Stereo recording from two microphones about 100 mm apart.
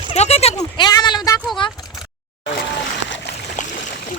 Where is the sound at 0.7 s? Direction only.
45° left (ahead or behind).